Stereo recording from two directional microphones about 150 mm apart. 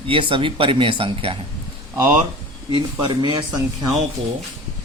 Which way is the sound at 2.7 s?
30° right (ahead or behind).